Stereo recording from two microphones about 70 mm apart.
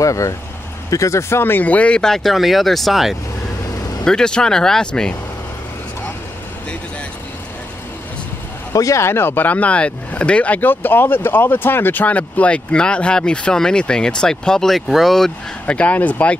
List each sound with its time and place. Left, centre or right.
0.0 s speech: left
1.4 s speech: left; by 3.2 s centre
4.0 s speech: centre
8.7 s speech: left; by 15.3 s centre
15.6 s speech: left